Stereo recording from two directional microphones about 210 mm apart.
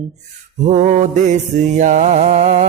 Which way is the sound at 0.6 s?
35° right (ahead or behind).